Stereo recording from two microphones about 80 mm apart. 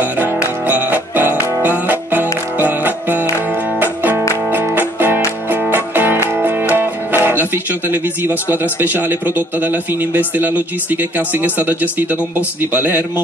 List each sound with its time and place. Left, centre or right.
0.7 s music: right
6.7 s speech: right